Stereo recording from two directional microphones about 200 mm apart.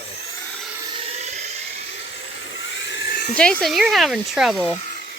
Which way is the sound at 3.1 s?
40° left (ahead or behind).